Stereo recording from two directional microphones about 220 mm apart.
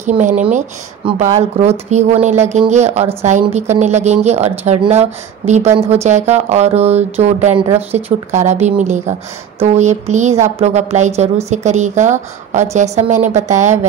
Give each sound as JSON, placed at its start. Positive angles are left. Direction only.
{"t": 0.0, "sound": "a woman's voice", "side_deg": -30}